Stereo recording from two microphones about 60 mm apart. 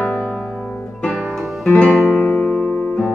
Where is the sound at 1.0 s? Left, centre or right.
Centre.